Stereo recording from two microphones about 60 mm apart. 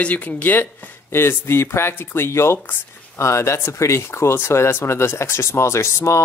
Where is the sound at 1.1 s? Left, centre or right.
Left.